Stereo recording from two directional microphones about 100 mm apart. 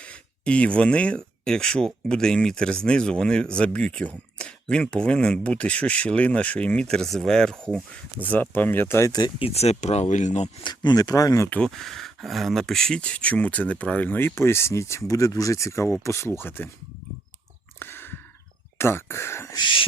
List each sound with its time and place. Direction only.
0.0 s speech: 15° left (ahead or behind)
9.4 s speech: 90° left
10.6 s speech: 45° left (ahead or behind)
11.4 s speech: 15° left (ahead or behind)
11.7 s speech: centre (ahead or behind); by 16.6 s 20° left (ahead or behind)
17.7 s a sound: 20° left (ahead or behind)
18.8 s speech: 25° left (ahead or behind)
19.5 s speech: 55° left (ahead or behind)